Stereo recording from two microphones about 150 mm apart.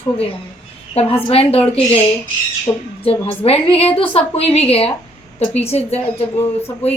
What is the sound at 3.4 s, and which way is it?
Speech, 40° left (ahead or behind).